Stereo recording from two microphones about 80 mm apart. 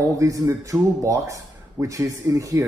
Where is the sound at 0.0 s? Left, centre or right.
Right.